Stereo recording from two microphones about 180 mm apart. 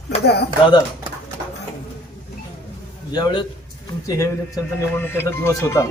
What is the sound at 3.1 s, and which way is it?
Speech, 25° left (ahead or behind).